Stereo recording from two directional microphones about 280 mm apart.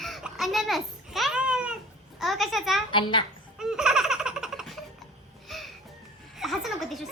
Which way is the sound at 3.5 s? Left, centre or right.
Centre.